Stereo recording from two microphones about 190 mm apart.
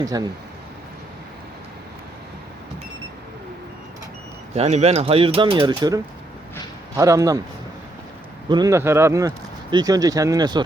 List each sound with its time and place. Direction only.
0.0 s speech: 20° right (ahead or behind)
4.5 s speech: 35° right (ahead or behind); by 7.4 s 20° right (ahead or behind)
8.4 s speech: 20° right (ahead or behind)